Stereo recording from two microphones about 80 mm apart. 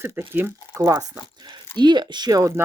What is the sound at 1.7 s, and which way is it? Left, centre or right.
Speech, right.